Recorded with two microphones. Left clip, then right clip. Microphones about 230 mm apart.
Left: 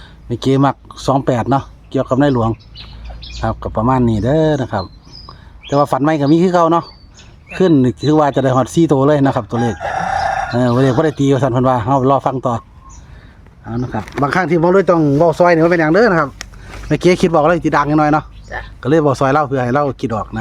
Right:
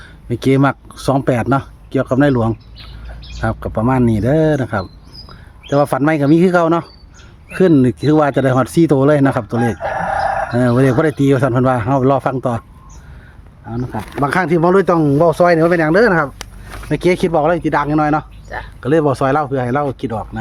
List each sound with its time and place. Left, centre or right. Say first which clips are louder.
0.0 s speech: right 1 dB; centre
13.7 s speech: left 2 dB; centre
16.9 s speech: left 2 dB; left